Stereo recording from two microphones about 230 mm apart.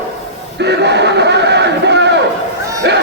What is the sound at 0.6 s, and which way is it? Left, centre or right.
Music, right.